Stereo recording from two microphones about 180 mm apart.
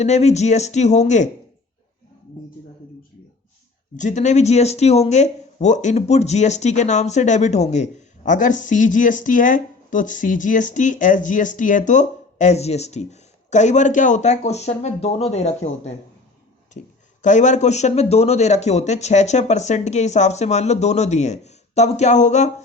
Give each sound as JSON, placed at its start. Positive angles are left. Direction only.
{"t": 0.0, "sound": "speech", "side_deg": 40}
{"t": 3.9, "sound": "speech", "side_deg": 45}
{"t": 17.2, "sound": "speech", "side_deg": 45}